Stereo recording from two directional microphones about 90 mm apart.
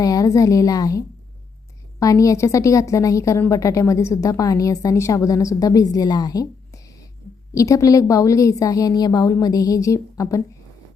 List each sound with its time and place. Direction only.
0.0 s a woman's voice: 40° left (ahead or behind)
7.5 s a woman's voice: 40° left (ahead or behind)